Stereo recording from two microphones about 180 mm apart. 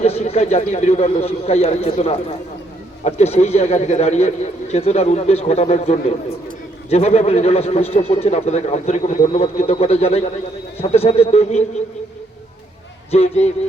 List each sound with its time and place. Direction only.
0.0 s a man's voice: 35° left (ahead or behind)
13.1 s a man's voice: 35° left (ahead or behind)